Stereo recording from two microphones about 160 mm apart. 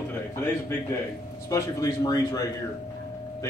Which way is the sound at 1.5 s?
20° left (ahead or behind).